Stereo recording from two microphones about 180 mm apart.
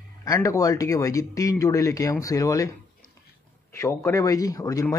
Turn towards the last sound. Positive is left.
turn(degrees=20)  # may be behind; listen again after turning